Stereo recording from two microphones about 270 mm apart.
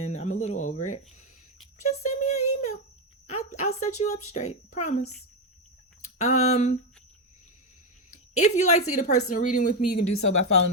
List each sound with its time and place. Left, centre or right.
0.0 s a sound: left
4.0 s speech: left
6.1 s speech: left
8.1 s speech: left
10.0 s speech: left